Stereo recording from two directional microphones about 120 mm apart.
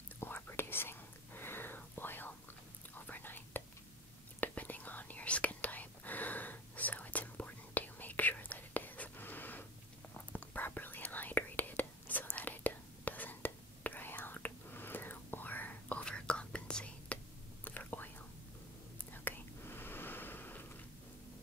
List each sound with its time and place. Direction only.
0.2 s whispering: 20° left (ahead or behind)